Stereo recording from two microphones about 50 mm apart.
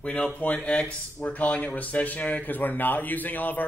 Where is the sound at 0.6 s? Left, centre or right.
Left.